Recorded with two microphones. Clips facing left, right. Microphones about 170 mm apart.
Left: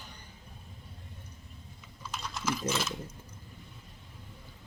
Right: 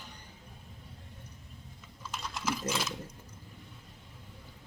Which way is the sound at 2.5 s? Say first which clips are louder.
Left 2 dB; 10° right (ahead or behind).